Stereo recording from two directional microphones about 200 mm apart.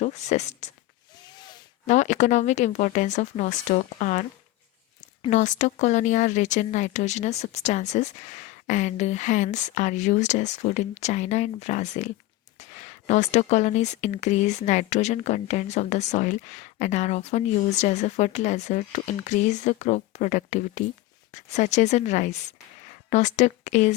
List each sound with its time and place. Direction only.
0.0 s speech: 35° left (ahead or behind)
1.4 s a sound: 20° left (ahead or behind)
1.9 s speech: 35° left (ahead or behind)